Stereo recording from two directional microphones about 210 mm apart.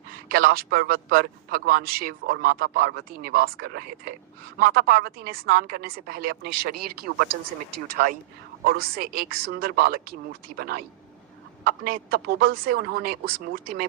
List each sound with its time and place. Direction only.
0.3 s a man's voice: 45° right (ahead or behind)